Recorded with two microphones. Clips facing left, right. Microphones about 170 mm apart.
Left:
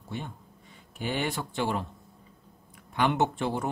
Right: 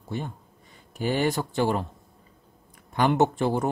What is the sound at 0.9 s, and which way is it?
Speech, 40° right (ahead or behind).